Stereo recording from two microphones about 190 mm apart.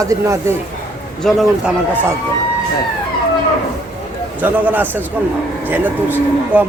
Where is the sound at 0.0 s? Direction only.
15° right (ahead or behind).